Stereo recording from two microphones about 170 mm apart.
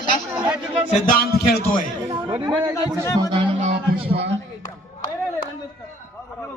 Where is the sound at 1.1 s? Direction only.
65° left (ahead or behind).